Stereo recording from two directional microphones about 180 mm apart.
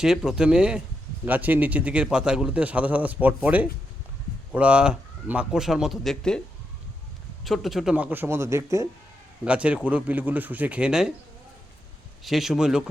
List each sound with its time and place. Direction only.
0.0 s a man's voice: centre (ahead or behind)
7.4 s a man's voice: centre (ahead or behind)
12.2 s speech: centre (ahead or behind)